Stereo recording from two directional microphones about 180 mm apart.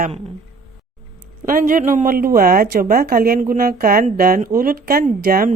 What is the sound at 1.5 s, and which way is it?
Speech, 50° right (ahead or behind).